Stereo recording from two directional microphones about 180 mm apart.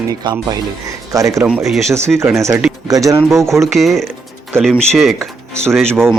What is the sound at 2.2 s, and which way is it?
Speech, 15° right (ahead or behind).